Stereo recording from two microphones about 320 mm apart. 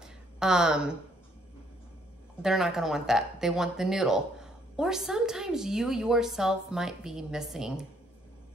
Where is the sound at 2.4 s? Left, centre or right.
Centre.